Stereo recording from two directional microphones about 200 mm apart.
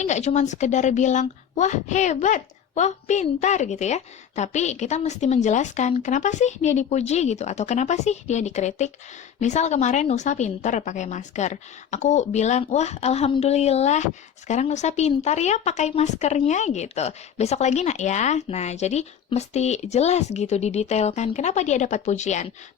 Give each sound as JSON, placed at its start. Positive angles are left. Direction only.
{"t": 0.0, "sound": "a woman's voice", "side_deg": 35}